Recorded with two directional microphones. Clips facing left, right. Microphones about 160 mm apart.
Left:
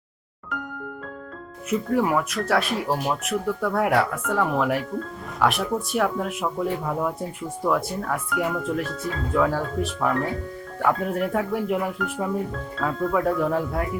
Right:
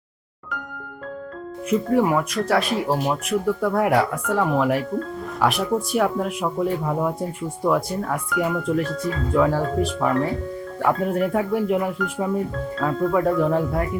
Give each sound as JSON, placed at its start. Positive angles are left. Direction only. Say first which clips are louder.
{"t": 1.9, "sound": "speech", "louder": "right 2 dB", "side_deg": 0}